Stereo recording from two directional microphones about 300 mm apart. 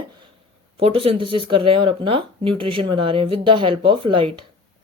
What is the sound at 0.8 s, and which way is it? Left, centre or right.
Speech, centre.